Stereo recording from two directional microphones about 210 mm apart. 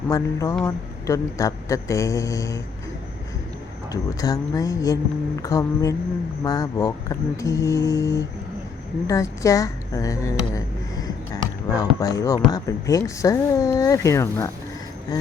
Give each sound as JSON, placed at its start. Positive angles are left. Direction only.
{"t": 0.1, "sound": "speech", "side_deg": 15}
{"t": 3.9, "sound": "speech", "side_deg": 15}